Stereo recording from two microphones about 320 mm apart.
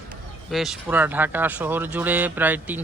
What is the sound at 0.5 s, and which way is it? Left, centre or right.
Speech, centre.